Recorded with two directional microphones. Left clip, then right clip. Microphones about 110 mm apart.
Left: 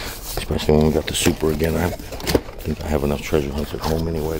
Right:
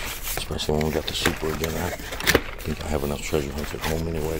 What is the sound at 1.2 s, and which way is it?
Speech, 65° left (ahead or behind).